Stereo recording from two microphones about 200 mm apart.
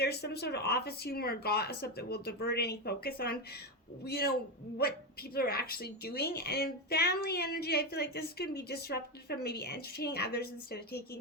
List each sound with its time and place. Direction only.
0.0 s a woman's voice: 55° left (ahead or behind)